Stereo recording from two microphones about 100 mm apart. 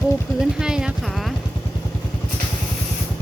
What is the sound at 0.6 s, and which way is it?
Speech, 5° right (ahead or behind).